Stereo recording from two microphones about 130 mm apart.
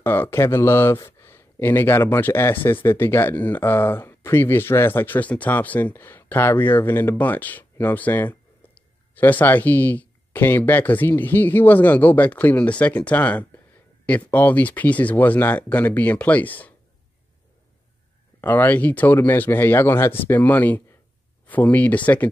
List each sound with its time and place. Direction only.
0.0 s a man's voice: 20° left (ahead or behind)
18.4 s a man's voice: 15° left (ahead or behind)